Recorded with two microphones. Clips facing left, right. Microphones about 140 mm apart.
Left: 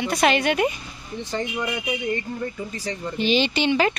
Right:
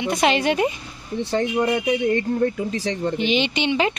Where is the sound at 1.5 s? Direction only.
60° right (ahead or behind); by 3.1 s 90° right.